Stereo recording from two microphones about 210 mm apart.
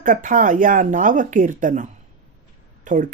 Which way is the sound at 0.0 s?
40° right (ahead or behind).